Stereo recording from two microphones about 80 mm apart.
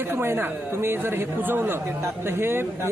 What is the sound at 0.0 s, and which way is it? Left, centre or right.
Speech, right.